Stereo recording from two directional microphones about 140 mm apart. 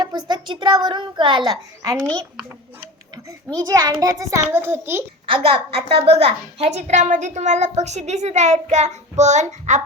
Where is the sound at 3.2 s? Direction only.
25° right (ahead or behind).